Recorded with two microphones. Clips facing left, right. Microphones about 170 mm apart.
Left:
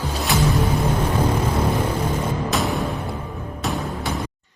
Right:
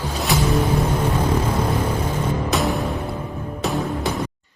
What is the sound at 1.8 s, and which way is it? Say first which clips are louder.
Music: even; 10° left (ahead or behind).